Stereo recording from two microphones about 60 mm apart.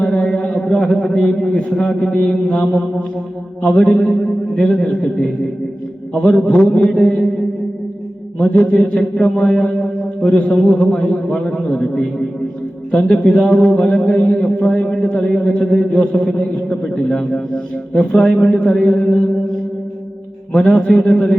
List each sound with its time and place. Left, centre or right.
0.0 s a man's voice: left
20.6 s a man's voice: centre